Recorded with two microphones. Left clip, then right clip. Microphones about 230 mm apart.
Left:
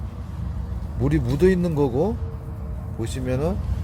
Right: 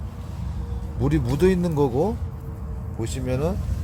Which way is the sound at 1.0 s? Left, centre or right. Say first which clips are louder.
Left 1 dB; centre.